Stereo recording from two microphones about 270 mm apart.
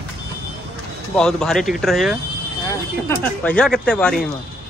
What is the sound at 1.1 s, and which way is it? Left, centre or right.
Speech, centre.